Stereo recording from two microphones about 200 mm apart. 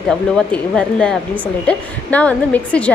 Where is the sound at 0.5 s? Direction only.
5° left (ahead or behind).